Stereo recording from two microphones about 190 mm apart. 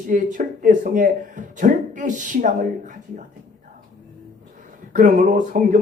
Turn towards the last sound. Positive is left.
turn(degrees=-45)  # may be behind; listen again after turning